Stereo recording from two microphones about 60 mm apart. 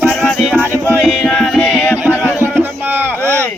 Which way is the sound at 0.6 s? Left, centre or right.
Right.